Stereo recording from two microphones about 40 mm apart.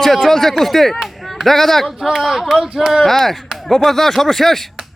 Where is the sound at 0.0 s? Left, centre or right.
Centre.